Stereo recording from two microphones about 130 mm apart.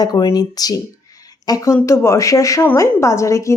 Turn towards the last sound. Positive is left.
turn(degrees=25)  # may be behind; listen again after turning